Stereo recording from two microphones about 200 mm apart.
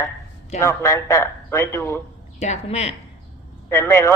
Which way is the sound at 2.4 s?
35° left (ahead or behind).